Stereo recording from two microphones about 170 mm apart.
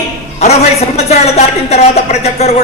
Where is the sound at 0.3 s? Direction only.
40° left (ahead or behind).